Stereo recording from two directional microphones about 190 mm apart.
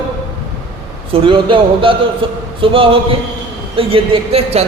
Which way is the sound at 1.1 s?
25° right (ahead or behind).